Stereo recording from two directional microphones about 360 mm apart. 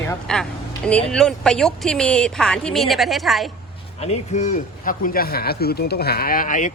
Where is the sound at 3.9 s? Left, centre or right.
Centre.